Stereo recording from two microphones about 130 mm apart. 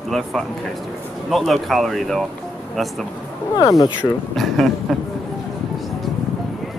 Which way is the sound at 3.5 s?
30° left (ahead or behind).